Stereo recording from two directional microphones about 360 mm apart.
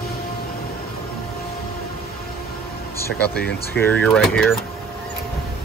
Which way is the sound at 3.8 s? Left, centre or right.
Centre.